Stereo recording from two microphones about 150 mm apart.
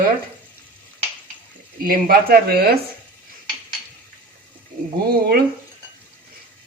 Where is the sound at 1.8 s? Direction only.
85° right.